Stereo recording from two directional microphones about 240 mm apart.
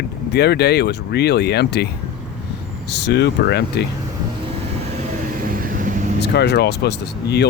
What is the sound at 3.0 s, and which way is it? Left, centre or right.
Speech, left.